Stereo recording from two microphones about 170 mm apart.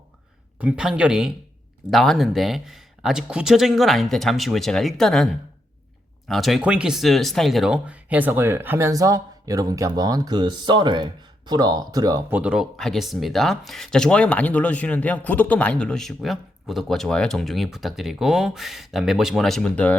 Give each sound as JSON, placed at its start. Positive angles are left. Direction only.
{"t": 0.6, "sound": "speech", "side_deg": -5}
{"t": 12.3, "sound": "speech", "side_deg": -5}